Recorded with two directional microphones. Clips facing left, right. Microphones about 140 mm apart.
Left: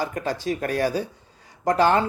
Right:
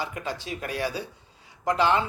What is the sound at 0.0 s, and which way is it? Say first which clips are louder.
Speech: left 6 dB; 45° left (ahead or behind).